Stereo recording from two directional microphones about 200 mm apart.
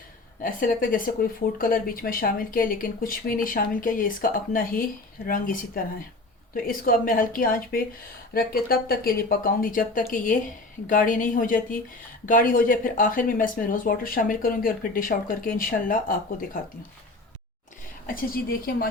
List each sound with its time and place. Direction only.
0.4 s a woman's voice: 45° left (ahead or behind)
18.0 s speech: 45° left (ahead or behind)